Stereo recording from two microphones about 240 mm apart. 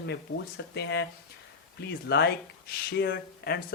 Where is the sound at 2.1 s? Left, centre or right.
Left.